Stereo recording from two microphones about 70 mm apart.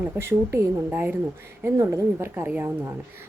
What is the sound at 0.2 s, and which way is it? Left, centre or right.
Speech, right.